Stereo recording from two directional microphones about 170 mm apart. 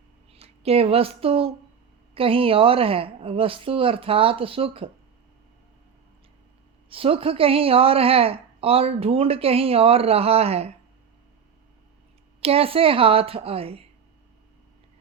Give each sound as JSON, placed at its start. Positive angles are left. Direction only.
{"t": 0.3, "sound": "a woman's voice", "side_deg": -35}
{"t": 6.9, "sound": "a woman's voice", "side_deg": -35}
{"t": 12.4, "sound": "a woman's voice", "side_deg": -35}